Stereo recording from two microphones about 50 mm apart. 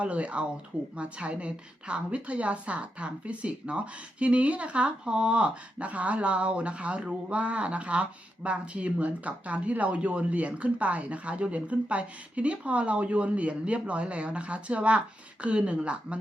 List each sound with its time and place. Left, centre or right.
0.0 s speech: right